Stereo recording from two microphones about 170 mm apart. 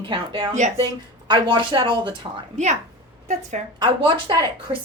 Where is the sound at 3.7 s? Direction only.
25° right (ahead or behind).